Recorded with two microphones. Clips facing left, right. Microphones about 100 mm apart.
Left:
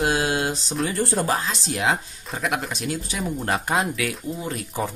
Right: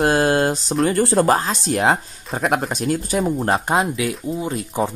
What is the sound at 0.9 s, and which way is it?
Speech, 80° right.